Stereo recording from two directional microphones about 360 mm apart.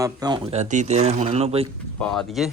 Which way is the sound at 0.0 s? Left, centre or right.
Centre.